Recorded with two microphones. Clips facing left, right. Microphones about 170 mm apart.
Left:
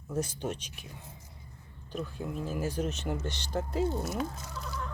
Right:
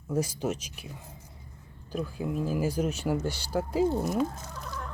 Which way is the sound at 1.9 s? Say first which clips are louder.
Right 4 dB; 5° right (ahead or behind).